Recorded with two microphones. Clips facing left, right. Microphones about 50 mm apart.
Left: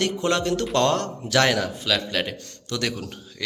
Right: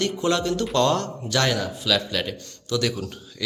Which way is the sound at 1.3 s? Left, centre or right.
Left.